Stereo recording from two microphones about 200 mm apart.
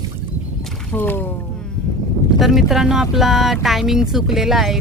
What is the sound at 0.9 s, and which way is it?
Speech, 10° left (ahead or behind).